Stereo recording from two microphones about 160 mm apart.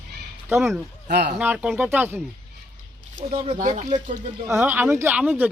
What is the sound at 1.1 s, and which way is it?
Speech, 90° right.